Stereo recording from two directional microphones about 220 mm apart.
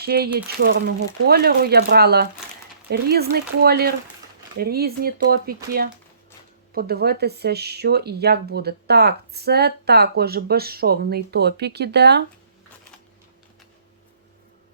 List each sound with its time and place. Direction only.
0.0 s a woman's voice: 45° right (ahead or behind)
6.7 s a woman's voice: 45° right (ahead or behind)